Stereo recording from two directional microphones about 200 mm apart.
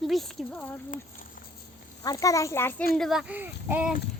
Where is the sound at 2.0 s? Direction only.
15° left (ahead or behind).